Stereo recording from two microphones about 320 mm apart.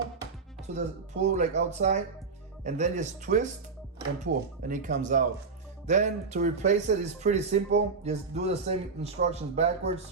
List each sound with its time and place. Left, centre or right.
0.7 s a man's voice: right